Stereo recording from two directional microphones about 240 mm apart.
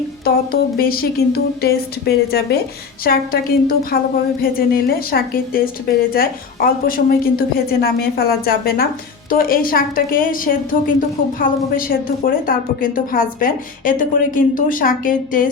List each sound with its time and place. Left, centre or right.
0.3 s a woman's voice: left
3.7 s a woman's voice: left